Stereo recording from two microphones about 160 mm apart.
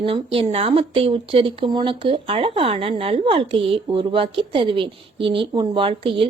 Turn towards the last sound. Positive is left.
turn(degrees=-35)  # may be behind; listen again after turning